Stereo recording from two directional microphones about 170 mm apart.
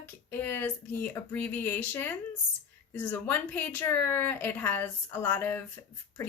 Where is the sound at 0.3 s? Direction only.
15° left (ahead or behind).